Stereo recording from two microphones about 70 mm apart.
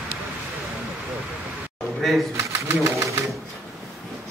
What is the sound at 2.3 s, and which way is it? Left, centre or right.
Sewing machine, right.